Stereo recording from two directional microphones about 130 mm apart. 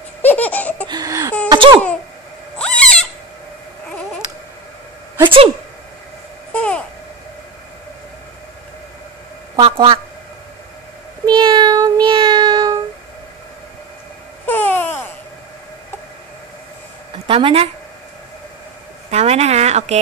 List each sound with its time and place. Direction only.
0.2 s laughter: 15° left (ahead or behind)
0.8 s a sound: 30° right (ahead or behind)
1.5 s laughter: 35° right (ahead or behind)
2.6 s goat: 10° left (ahead or behind)
5.2 s speech: 45° right (ahead or behind)
6.5 s babbling: 10° left (ahead or behind)
9.6 s a woman's voice: 45° right (ahead or behind)
11.2 s child singing: 35° right (ahead or behind)
14.4 s babbling: 15° left (ahead or behind)
17.3 s speech: 45° right (ahead or behind)
19.0 s a sound: 55° right (ahead or behind)